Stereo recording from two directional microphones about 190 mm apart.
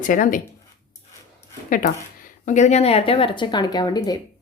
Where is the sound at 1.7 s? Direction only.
45° left (ahead or behind).